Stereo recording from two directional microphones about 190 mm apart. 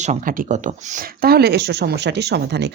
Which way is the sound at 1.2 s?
55° right (ahead or behind).